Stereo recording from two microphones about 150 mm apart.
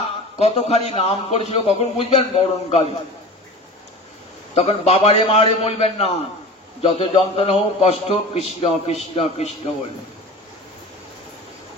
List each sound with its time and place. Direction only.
0.4 s a man's voice: 45° left (ahead or behind)
4.6 s a man's voice: 45° left (ahead or behind)